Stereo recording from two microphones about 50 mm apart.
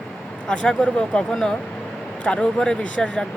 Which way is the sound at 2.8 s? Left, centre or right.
Left.